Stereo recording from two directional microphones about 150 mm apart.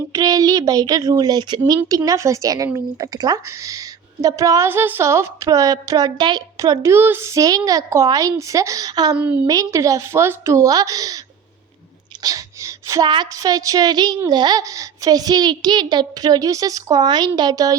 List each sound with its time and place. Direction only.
0.1 s a woman's voice: 25° right (ahead or behind)
9.1 s a woman's voice: 10° right (ahead or behind)
9.5 s a woman's voice: 25° right (ahead or behind)
12.2 s a woman's voice: 25° right (ahead or behind)